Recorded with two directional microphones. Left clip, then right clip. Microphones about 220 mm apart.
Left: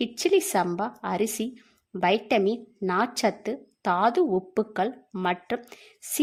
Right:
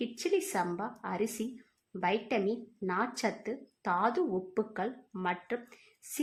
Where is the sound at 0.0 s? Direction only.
40° left (ahead or behind).